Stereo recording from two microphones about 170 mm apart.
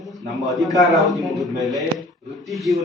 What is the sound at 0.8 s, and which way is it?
Speech, centre (ahead or behind).